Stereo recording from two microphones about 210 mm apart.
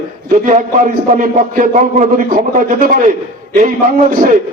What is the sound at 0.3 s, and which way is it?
A man's voice, 35° right (ahead or behind).